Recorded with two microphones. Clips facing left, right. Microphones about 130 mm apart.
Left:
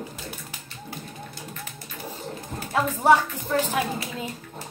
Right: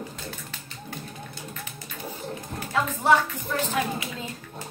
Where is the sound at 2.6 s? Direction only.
35° left (ahead or behind).